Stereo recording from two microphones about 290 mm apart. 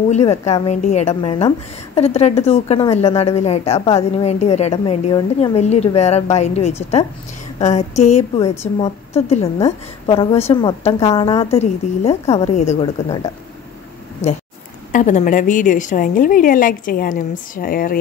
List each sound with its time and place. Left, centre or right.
0.1 s a woman's voice: left
14.9 s a woman's voice: left